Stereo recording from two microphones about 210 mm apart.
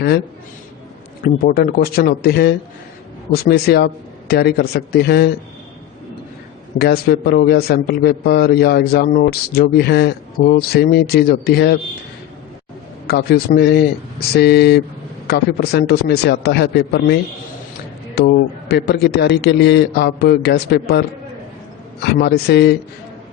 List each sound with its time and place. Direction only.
1.2 s a man's voice: 45° left (ahead or behind)
6.7 s a man's voice: 50° left (ahead or behind)
13.1 s a man's voice: 50° left (ahead or behind)
18.2 s a man's voice: 50° left (ahead or behind)
22.0 s a man's voice: 50° left (ahead or behind)